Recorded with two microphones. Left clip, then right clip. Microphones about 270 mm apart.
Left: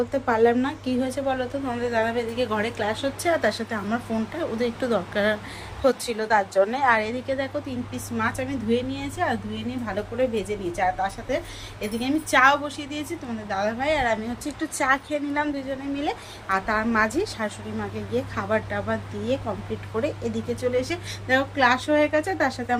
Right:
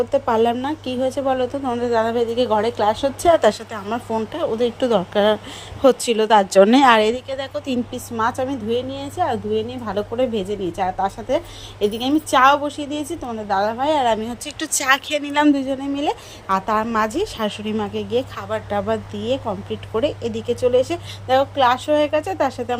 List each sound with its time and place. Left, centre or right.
0.1 s a woman's voice: right